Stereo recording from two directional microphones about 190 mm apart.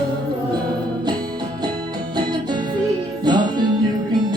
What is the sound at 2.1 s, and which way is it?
Music, 20° right (ahead or behind).